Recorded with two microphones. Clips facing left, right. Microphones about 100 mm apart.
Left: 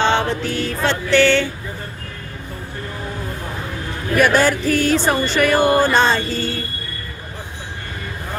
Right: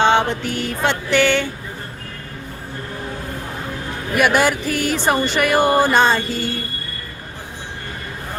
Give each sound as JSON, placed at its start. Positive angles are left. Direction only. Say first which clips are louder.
{"t": 0.0, "sound": "music", "louder": "right 2 dB", "side_deg": -20}
{"t": 4.1, "sound": "music", "louder": "left 1 dB", "side_deg": -15}